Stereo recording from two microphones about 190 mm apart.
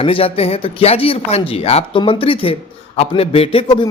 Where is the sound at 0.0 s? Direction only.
30° left (ahead or behind).